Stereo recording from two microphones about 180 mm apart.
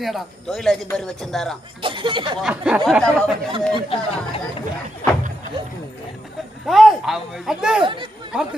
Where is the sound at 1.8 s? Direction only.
25° right (ahead or behind).